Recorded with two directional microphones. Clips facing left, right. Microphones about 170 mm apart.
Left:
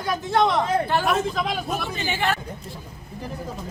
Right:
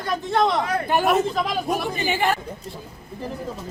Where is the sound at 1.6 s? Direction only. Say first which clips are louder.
Right 4 dB; 15° right (ahead or behind).